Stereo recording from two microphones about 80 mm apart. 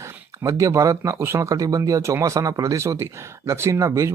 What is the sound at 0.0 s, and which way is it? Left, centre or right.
Speech, right.